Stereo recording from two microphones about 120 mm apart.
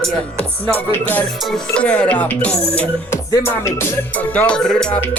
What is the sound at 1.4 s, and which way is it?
Music, 5° left (ahead or behind).